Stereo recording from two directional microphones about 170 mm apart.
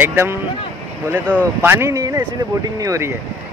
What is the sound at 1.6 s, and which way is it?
Speech, 15° right (ahead or behind).